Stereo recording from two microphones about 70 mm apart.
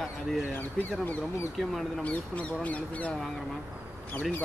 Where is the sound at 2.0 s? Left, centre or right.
Centre.